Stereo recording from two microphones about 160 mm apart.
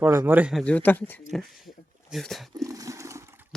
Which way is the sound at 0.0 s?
15° right (ahead or behind).